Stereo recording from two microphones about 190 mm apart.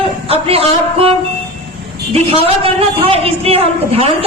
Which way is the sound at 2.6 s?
30° right (ahead or behind).